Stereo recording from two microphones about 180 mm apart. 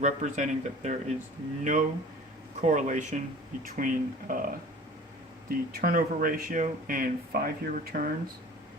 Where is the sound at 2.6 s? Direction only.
40° right (ahead or behind).